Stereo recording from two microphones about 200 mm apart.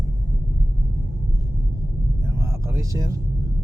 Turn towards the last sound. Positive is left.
turn(degrees=-15)  # may be behind; listen again after turning